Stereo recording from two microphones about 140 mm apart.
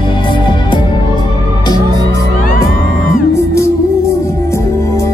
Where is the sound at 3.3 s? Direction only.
20° left (ahead or behind).